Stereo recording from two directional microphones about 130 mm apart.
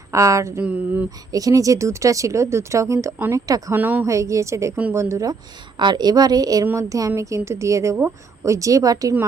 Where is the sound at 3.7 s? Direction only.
15° right (ahead or behind).